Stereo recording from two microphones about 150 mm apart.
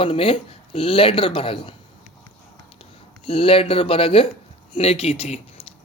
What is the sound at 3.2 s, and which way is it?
Speech, 40° left (ahead or behind).